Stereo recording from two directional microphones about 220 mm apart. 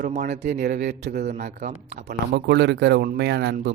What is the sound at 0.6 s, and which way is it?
A man's voice, 45° right (ahead or behind).